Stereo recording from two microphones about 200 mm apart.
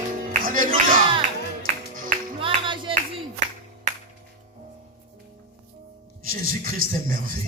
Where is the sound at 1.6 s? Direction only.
40° right (ahead or behind).